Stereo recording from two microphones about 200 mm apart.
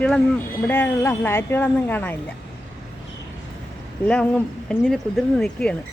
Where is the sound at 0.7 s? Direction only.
10° left (ahead or behind).